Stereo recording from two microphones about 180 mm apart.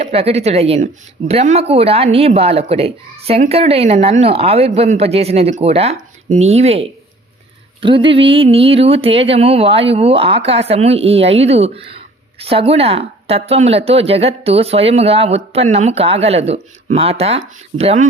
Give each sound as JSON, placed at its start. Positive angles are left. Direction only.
{"t": 0.0, "sound": "speech", "side_deg": -35}